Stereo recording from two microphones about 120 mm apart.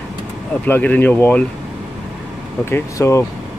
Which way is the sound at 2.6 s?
20° left (ahead or behind).